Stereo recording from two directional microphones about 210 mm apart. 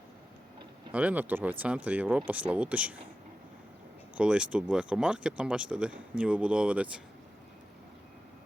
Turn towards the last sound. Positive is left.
turn(degrees=-5)  # may be behind; listen again after turning